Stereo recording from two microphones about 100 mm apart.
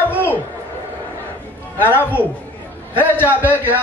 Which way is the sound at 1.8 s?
20° left (ahead or behind).